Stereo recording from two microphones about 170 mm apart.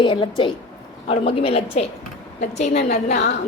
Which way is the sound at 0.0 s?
30° left (ahead or behind).